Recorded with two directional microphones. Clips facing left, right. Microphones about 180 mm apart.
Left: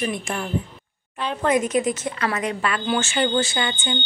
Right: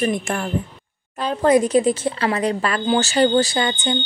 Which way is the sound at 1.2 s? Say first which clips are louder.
Right 5 dB; 35° right (ahead or behind).